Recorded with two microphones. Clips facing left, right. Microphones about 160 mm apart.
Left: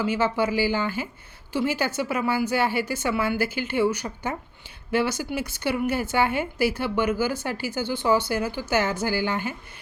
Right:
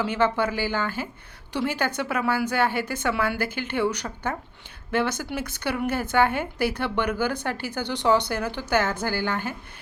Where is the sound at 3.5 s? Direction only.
55° right (ahead or behind).